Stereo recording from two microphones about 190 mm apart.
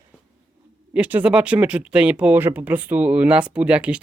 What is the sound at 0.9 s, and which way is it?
Speech, 5° right (ahead or behind).